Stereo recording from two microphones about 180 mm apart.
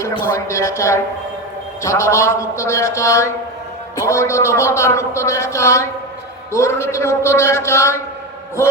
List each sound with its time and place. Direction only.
0.0 s a man's voice: 15° left (ahead or behind)